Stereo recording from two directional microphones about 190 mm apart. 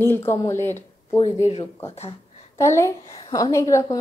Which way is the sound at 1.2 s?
35° left (ahead or behind).